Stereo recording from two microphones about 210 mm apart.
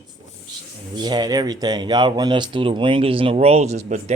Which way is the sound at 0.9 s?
20° right (ahead or behind).